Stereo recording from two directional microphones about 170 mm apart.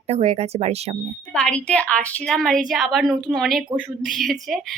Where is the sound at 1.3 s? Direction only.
5° left (ahead or behind).